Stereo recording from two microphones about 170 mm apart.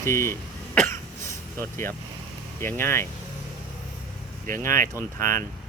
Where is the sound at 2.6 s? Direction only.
15° left (ahead or behind).